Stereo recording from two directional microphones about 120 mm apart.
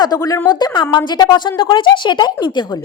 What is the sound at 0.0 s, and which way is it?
A woman's voice, 30° left (ahead or behind).